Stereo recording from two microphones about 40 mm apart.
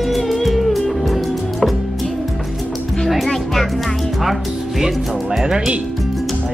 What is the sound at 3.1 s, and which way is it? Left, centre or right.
Music, centre.